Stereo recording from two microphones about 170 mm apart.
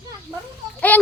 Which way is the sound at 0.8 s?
10° left (ahead or behind).